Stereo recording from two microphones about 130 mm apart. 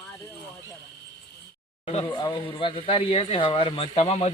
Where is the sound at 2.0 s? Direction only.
35° left (ahead or behind).